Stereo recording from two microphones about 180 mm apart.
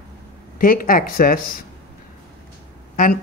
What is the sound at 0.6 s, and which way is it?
Speech, 50° left (ahead or behind).